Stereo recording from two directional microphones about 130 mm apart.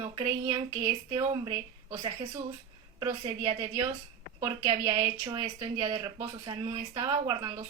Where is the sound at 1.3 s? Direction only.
35° right (ahead or behind).